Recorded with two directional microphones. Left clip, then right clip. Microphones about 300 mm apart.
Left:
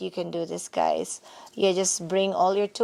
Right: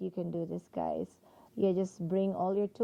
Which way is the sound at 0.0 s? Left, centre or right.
Centre.